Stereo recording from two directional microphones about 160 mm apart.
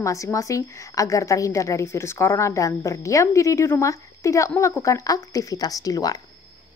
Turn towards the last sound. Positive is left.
turn(degrees=25)  # may be behind; listen again after turning